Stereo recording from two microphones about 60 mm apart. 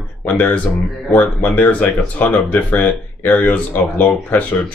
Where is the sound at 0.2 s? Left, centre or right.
Left.